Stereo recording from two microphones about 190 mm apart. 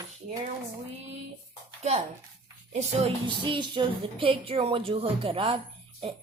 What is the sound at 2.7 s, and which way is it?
A woman's voice, 30° right (ahead or behind).